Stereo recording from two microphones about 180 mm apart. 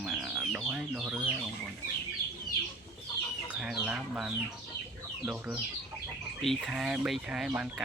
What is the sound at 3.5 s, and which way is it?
Speech, 5° right (ahead or behind).